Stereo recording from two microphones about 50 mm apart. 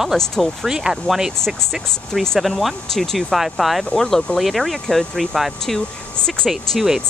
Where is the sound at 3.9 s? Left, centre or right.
Centre.